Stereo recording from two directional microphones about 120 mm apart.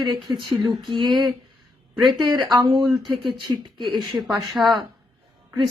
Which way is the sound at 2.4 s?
40° right (ahead or behind).